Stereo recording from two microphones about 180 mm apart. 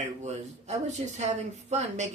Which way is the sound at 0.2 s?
40° right (ahead or behind).